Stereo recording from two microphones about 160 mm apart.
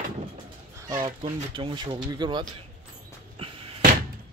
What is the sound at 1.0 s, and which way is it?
Speech, 30° right (ahead or behind).